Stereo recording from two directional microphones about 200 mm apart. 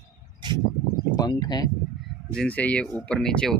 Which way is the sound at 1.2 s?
20° left (ahead or behind).